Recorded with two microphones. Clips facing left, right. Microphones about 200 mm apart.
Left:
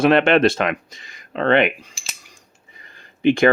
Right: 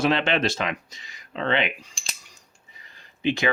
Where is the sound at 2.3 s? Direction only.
55° left (ahead or behind).